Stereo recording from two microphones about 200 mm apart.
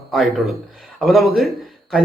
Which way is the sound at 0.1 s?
Centre (ahead or behind).